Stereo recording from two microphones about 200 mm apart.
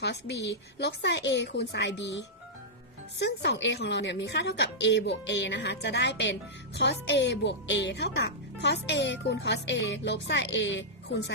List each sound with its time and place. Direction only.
0.0 s speech: 55° left (ahead or behind)